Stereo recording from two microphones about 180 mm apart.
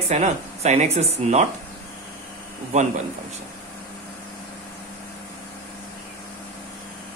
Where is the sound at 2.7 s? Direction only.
40° right (ahead or behind).